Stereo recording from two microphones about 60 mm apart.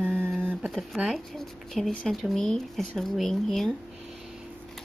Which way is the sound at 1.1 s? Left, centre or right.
Centre.